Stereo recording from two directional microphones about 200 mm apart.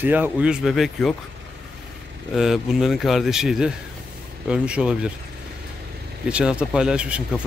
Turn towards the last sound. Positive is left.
turn(degrees=-5)  # may be behind; listen again after turning